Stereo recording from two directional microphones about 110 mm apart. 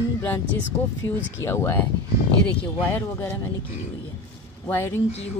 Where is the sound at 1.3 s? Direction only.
25° left (ahead or behind).